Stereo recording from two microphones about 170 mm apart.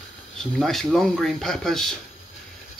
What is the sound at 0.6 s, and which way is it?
Speech, centre (ahead or behind).